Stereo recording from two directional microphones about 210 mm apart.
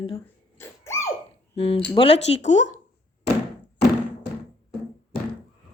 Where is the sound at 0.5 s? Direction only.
10° left (ahead or behind).